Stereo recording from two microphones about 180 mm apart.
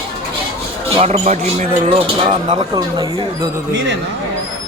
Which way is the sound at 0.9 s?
35° right (ahead or behind).